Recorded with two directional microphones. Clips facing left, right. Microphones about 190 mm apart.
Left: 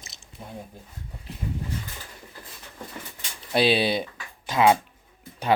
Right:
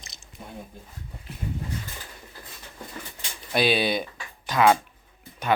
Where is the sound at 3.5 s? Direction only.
30° left (ahead or behind).